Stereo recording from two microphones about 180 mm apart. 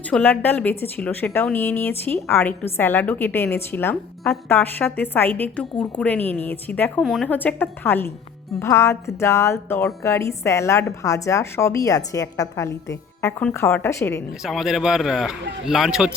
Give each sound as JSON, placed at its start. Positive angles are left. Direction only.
{"t": 0.1, "sound": "speech", "side_deg": 10}
{"t": 14.4, "sound": "speech", "side_deg": 0}